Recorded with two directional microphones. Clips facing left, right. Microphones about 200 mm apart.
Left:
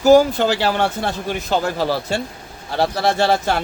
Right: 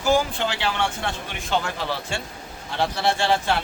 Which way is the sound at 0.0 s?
40° left (ahead or behind).